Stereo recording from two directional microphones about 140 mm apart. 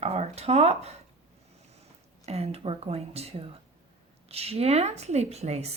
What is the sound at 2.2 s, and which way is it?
Speech, 45° right (ahead or behind).